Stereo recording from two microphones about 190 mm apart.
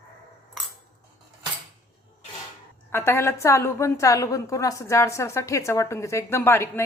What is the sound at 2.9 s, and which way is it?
A woman's voice, 15° left (ahead or behind).